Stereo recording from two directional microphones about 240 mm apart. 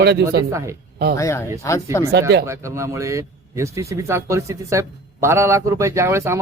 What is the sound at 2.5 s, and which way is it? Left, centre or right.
Speech, centre.